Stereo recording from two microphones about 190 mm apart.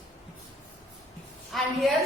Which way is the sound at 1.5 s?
Centre (ahead or behind).